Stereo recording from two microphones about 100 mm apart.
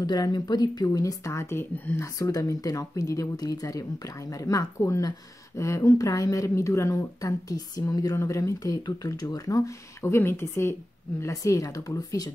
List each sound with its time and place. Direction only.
0.0 s speech: 45° left (ahead or behind); by 2.0 s 25° left (ahead or behind)
2.1 s speech: 35° left (ahead or behind)
10.0 s a woman's voice: 25° left (ahead or behind)